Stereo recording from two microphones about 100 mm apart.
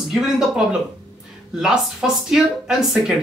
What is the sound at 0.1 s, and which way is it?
Speech, 5° right (ahead or behind).